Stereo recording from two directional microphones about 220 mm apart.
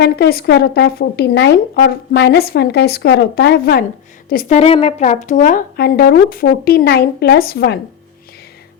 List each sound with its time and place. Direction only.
0.0 s speech: 45° left (ahead or behind)